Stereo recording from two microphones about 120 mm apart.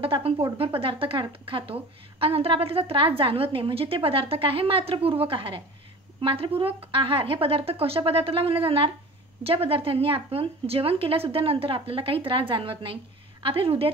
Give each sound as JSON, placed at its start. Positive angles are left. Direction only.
{"t": 0.0, "sound": "speech", "side_deg": -50}